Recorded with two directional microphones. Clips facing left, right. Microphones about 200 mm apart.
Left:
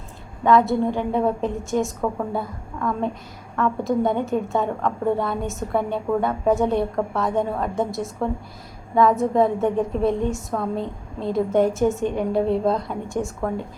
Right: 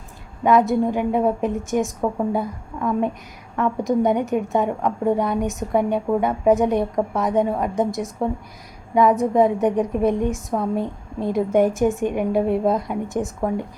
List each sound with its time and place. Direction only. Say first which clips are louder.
0.4 s a woman's voice: right 1 dB; 15° right (ahead or behind)